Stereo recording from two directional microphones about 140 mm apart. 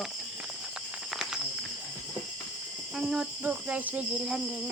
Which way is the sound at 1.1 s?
5° right (ahead or behind).